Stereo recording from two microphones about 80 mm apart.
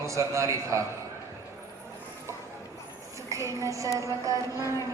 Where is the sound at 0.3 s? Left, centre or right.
Right.